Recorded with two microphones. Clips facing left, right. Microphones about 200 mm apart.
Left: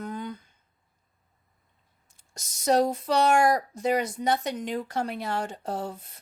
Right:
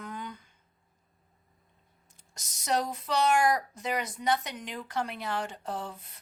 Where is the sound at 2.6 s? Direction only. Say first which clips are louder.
Left 8 dB; 40° left (ahead or behind).